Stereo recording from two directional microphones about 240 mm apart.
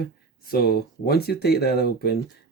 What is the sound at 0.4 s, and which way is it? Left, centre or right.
Speech, left.